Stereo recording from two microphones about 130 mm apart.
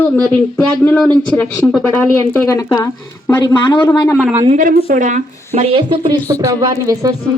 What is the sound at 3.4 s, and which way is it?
Speech, 35° left (ahead or behind).